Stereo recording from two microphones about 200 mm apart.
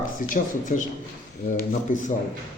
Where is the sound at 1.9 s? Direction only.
40° left (ahead or behind).